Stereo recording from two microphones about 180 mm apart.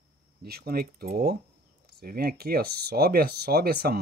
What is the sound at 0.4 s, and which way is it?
Speech, 60° right (ahead or behind).